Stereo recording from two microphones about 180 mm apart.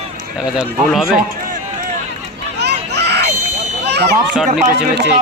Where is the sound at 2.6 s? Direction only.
65° right (ahead or behind).